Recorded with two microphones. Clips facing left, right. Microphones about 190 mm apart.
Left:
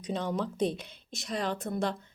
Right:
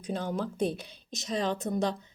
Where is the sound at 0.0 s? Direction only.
5° right (ahead or behind).